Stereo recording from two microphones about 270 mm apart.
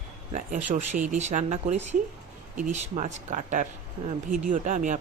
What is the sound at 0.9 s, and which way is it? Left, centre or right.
Speech, right.